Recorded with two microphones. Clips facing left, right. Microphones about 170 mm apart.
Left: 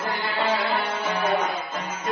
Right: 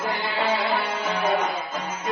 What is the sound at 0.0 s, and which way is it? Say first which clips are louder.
Music: right 1 dB; 10° right (ahead or behind).